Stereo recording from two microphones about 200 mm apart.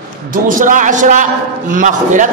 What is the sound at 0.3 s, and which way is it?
A man's voice, 40° right (ahead or behind).